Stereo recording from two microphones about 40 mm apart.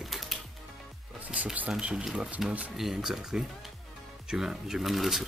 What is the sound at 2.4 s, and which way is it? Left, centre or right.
Speech, centre.